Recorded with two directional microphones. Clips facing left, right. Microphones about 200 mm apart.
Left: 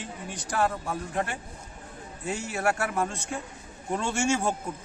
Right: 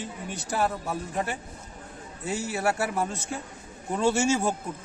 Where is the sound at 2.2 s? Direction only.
5° right (ahead or behind).